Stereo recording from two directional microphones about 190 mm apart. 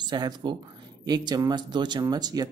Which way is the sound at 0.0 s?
25° right (ahead or behind).